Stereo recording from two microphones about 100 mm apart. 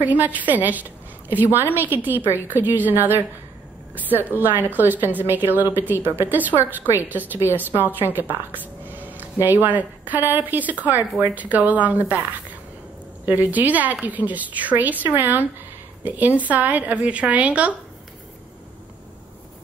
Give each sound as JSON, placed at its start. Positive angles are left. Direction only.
{"t": 0.0, "sound": "a woman's voice", "side_deg": -15}
{"t": 13.2, "sound": "a woman's voice", "side_deg": -20}